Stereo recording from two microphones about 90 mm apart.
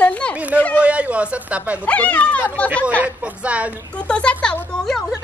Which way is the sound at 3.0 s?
15° right (ahead or behind).